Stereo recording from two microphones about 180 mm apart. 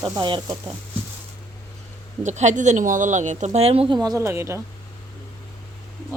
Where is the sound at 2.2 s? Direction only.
40° right (ahead or behind).